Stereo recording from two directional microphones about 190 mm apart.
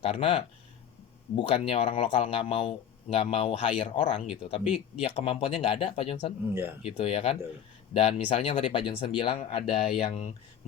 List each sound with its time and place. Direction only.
0.0 s speech: 30° left (ahead or behind)
6.5 s speech: 10° right (ahead or behind)
6.8 s speech: 30° left (ahead or behind)